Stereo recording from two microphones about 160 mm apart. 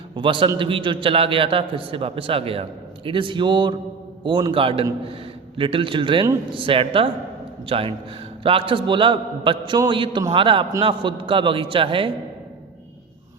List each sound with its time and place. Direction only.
0.2 s a man's voice: 30° right (ahead or behind)